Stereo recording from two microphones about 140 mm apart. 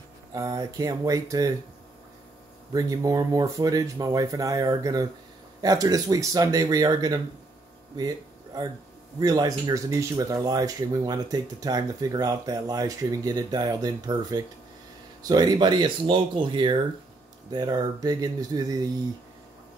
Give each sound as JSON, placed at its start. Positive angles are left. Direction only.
{"t": 0.3, "sound": "speech", "side_deg": -25}
{"t": 2.7, "sound": "speech", "side_deg": -25}
{"t": 9.2, "sound": "speech", "side_deg": -25}